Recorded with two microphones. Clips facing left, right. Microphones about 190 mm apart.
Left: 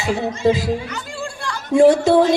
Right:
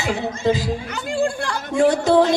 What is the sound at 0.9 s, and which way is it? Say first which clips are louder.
Chatter: right 8 dB; 55° right (ahead or behind).